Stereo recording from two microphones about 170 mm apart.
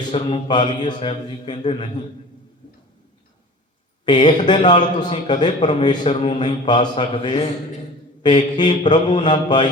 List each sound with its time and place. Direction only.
0.0 s a man's voice: 25° left (ahead or behind)
4.0 s a man's voice: 25° left (ahead or behind)